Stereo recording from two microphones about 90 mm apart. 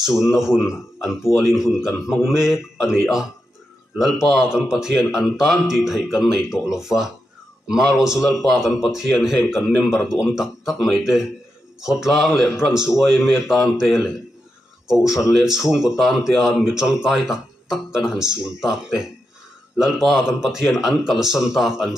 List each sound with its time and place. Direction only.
0.2 s speech: 5° right (ahead or behind)